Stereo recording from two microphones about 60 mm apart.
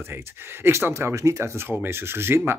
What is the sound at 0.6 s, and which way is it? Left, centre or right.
Speech, right.